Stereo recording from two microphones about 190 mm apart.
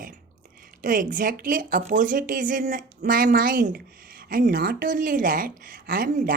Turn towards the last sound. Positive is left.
turn(degrees=-45)  # may be behind; listen again after turning